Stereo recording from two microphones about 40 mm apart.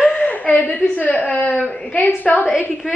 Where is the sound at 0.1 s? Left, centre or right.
Left.